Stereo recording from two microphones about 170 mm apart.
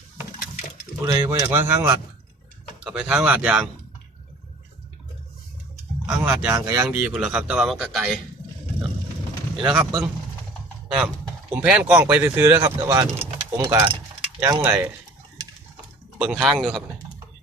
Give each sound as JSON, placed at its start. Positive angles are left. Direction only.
{"t": 1.0, "sound": "speech", "side_deg": -20}
{"t": 2.8, "sound": "a man's voice", "side_deg": -5}
{"t": 6.1, "sound": "a man's voice", "side_deg": -5}
{"t": 9.6, "sound": "speech", "side_deg": -30}
{"t": 11.5, "sound": "speech", "side_deg": -10}
{"t": 16.1, "sound": "a man's voice", "side_deg": -5}